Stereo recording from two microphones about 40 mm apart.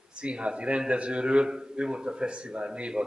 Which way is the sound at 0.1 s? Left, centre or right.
Right.